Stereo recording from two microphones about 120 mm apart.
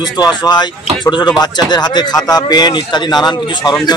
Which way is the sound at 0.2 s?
35° left (ahead or behind).